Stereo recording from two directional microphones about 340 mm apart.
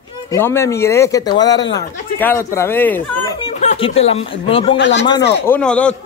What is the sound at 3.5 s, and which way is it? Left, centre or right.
Speech, centre.